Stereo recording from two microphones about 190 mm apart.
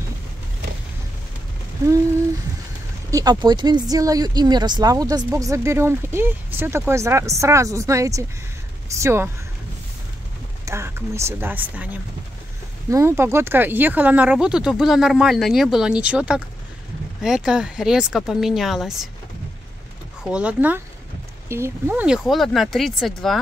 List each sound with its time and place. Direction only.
3.1 s speech: 20° right (ahead or behind)
10.6 s speech: 15° right (ahead or behind)
20.2 s speech: 5° right (ahead or behind)